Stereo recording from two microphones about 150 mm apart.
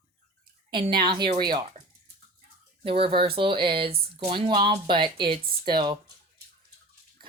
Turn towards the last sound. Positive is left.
turn(degrees=-30)  # may be behind; listen again after turning